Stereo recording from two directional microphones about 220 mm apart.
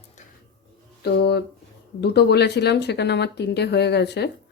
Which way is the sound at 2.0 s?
50° left (ahead or behind).